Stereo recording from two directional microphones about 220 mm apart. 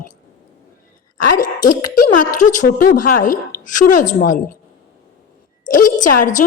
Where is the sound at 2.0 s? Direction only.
35° left (ahead or behind).